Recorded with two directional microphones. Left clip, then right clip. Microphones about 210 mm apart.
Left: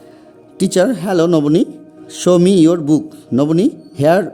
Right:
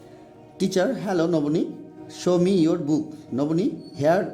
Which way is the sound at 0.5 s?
30° left (ahead or behind).